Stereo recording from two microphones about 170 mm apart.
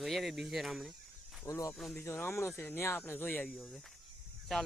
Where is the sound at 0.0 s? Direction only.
Centre (ahead or behind).